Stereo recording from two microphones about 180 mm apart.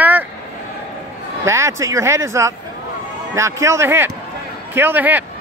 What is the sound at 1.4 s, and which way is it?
Speech, 15° right (ahead or behind).